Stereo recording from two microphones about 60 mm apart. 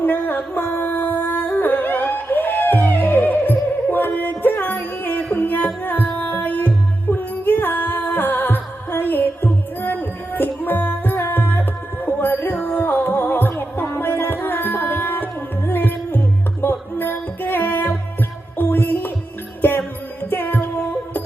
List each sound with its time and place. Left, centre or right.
0.0 s yodeling: left
7.1 s music: left
20.3 s music: left